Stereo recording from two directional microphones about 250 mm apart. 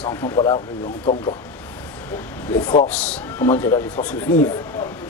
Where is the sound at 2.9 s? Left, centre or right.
Centre.